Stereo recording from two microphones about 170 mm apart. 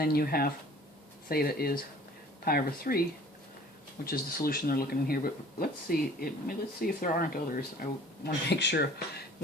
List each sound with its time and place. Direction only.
0.0 s speech: 60° left (ahead or behind)
4.0 s speech: 60° left (ahead or behind)